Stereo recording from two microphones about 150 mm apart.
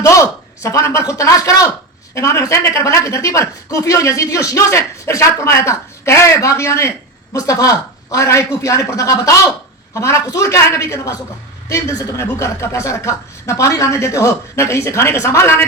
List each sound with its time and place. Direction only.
0.0 s a woman's voice: 20° left (ahead or behind)